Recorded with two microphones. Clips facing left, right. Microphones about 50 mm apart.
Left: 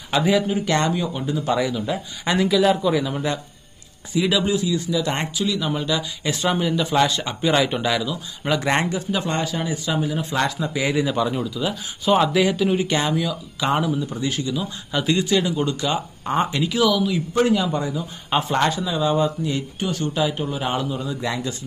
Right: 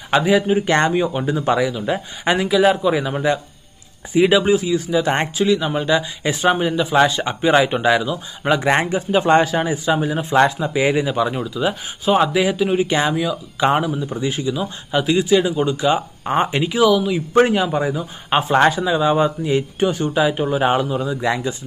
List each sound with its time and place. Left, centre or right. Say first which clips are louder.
0.4 s speech: right 4 dB; right
1.6 s a man's voice: right 3 dB; centre; by 6.8 s right
6.8 s speech: right 4 dB; centre
7.1 s speech: right 4 dB; right
9.3 s a man's voice: right 13 dB; right
9.7 s speech: right 5 dB; right
12.0 s speech: right 1 dB; centre
13.6 s speech: right 4 dB; right
17.3 s a man's voice: right 5 dB; right
17.6 s speech: right 4 dB; centre
17.9 s speech: right 3 dB; right